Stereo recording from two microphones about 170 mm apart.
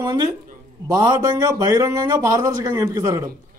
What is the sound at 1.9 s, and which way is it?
A man's voice, 20° right (ahead or behind).